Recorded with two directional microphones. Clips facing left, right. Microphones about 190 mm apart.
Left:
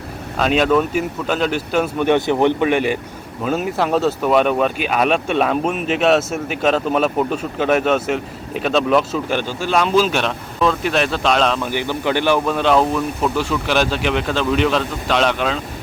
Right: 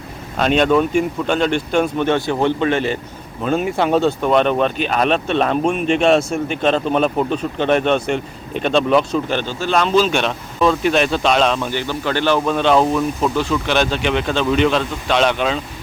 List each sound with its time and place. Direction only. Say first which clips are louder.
0.3 s speech: right 1 dB; centre (ahead or behind)
2.1 s speech: left 2 dB; 20° left (ahead or behind)
3.4 s speech: right 2 dB; 5° left (ahead or behind)
11.7 s speech: left 1 dB; 15° left (ahead or behind); by 15.6 s centre (ahead or behind)